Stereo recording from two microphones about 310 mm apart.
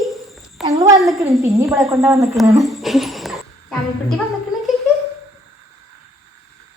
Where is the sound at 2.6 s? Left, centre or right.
Centre.